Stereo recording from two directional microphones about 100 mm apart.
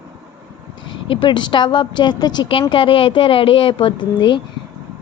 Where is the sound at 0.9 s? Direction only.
60° left (ahead or behind).